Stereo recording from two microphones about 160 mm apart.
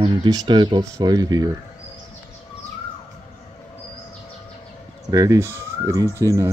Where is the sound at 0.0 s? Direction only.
25° right (ahead or behind).